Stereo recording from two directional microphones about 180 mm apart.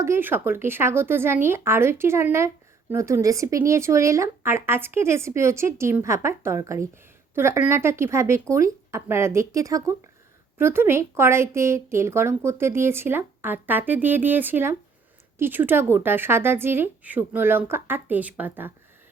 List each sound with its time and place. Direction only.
0.0 s a woman's voice: 10° right (ahead or behind)